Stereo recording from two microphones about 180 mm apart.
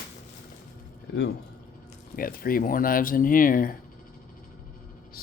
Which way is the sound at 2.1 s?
55° left (ahead or behind).